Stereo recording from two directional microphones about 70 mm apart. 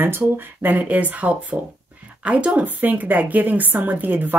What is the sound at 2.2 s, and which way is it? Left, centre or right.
A woman's voice, centre.